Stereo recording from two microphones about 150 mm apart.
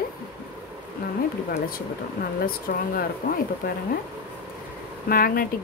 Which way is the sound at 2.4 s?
80° left.